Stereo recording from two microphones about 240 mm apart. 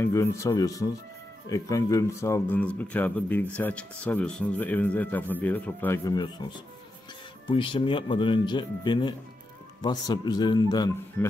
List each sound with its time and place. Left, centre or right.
0.0 s speech: centre
7.5 s speech: left